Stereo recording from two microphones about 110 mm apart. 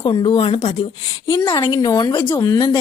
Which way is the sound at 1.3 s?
45° left (ahead or behind).